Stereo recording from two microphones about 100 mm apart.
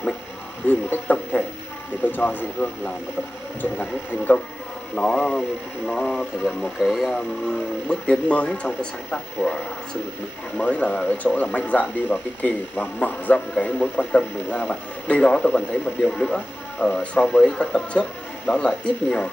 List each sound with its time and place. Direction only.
0.7 s speech: 15° left (ahead or behind)
10.6 s speech: 15° left (ahead or behind)